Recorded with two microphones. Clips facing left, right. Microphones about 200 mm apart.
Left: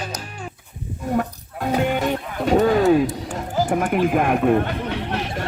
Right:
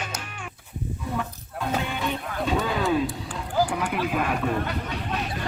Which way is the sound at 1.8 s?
45° left (ahead or behind).